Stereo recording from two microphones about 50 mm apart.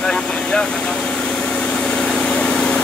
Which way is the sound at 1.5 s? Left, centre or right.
Centre.